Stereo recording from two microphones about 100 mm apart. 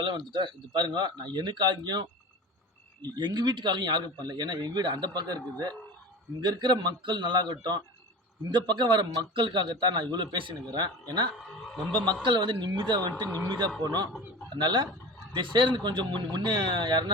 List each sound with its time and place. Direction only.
0.0 s speech: 50° right (ahead or behind)
6.4 s speech: 50° right (ahead or behind)